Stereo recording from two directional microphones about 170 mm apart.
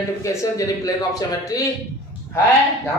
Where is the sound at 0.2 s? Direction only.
20° left (ahead or behind).